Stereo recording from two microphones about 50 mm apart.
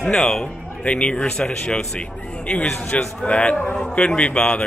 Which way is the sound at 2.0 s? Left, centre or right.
Left.